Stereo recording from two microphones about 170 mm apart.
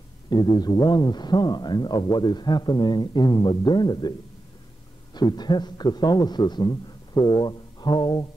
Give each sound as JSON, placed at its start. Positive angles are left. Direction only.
{"t": 0.3, "sound": "a man's voice", "side_deg": 25}
{"t": 5.1, "sound": "a man's voice", "side_deg": 25}